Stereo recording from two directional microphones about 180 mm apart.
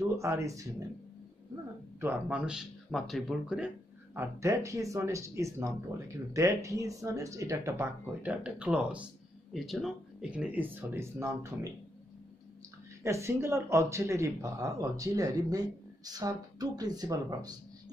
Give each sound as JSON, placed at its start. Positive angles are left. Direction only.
{"t": 0.1, "sound": "speech", "side_deg": -15}
{"t": 2.0, "sound": "speech", "side_deg": -10}
{"t": 13.0, "sound": "speech", "side_deg": -15}